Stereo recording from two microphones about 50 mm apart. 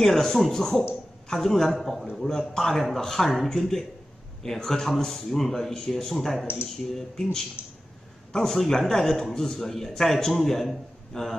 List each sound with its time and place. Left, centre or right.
0.0 s a man's voice: centre
7.6 s speech: left
8.3 s a man's voice: centre